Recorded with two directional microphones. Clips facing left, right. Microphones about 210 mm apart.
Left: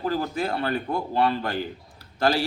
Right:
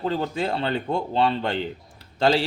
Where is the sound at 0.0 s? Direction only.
25° right (ahead or behind).